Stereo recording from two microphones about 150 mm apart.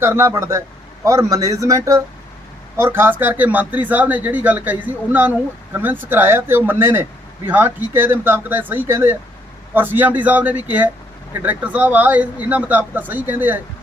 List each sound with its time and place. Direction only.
0.0 s speech: 15° right (ahead or behind)